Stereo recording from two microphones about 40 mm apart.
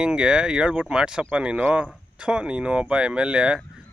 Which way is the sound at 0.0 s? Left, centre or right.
Centre.